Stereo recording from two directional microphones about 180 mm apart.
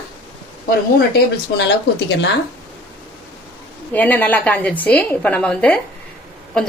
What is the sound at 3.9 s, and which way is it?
A woman's voice, 10° left (ahead or behind).